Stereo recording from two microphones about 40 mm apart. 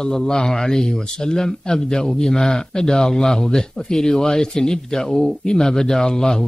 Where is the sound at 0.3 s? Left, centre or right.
Centre.